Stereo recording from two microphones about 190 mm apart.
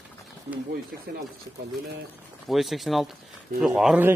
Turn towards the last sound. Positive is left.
turn(degrees=-5)  # may be behind; listen again after turning